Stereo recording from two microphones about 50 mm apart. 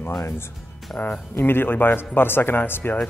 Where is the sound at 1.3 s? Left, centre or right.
Left.